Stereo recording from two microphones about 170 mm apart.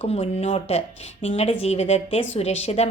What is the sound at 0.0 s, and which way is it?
A woman's voice, 40° left (ahead or behind).